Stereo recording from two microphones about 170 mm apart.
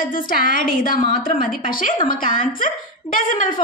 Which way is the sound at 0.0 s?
55° left (ahead or behind).